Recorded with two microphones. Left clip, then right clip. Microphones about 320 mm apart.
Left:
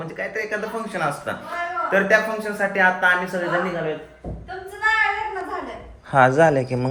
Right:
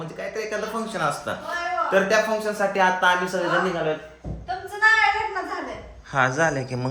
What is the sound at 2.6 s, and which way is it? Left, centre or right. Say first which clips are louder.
Speech: left 3 dB; centre.